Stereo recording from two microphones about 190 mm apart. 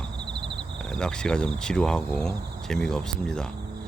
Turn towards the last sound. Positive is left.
turn(degrees=5)  # may be behind; listen again after turning